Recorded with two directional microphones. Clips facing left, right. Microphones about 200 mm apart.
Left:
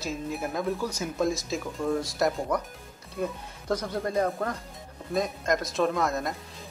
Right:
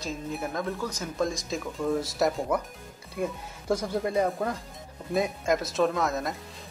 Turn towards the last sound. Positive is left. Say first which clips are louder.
# even
turn(degrees=0)  # may be behind; listen again after turning